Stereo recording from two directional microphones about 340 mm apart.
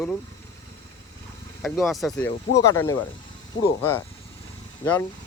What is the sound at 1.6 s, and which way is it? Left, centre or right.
Speech, centre.